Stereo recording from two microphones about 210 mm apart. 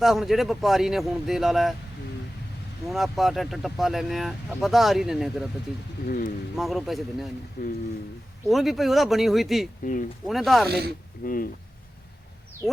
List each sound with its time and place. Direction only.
0.0 s speech: centre (ahead or behind)
2.9 s speech: centre (ahead or behind)
6.1 s speech: 45° left (ahead or behind)
6.6 s speech: centre (ahead or behind)
7.6 s speech: 45° left (ahead or behind)
8.4 s speech: centre (ahead or behind)
9.8 s speech: 40° left (ahead or behind)
10.2 s speech: centre (ahead or behind)
10.7 s speech: 50° right (ahead or behind)
11.2 s speech: 40° left (ahead or behind)